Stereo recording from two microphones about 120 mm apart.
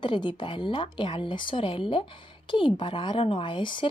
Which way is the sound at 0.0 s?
40° left (ahead or behind).